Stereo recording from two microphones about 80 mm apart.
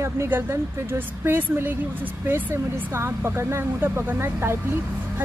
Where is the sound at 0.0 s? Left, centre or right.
Right.